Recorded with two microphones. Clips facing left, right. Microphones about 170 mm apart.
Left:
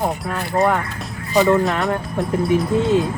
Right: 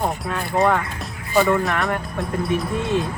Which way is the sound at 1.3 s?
20° left (ahead or behind).